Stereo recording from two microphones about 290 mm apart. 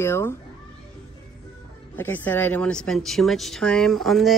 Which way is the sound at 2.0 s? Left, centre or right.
Centre.